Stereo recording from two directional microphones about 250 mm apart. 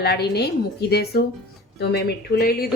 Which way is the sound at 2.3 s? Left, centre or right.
Left.